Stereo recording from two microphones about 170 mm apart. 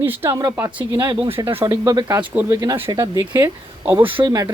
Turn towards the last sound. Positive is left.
turn(degrees=-25)  # may be behind; listen again after turning